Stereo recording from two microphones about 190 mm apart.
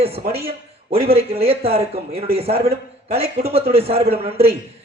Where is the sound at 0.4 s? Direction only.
30° right (ahead or behind).